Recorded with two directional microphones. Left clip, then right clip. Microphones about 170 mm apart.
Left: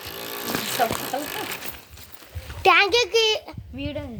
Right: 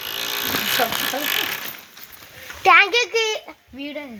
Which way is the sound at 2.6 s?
45° left (ahead or behind).